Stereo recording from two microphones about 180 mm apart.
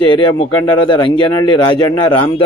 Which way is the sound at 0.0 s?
25° left (ahead or behind).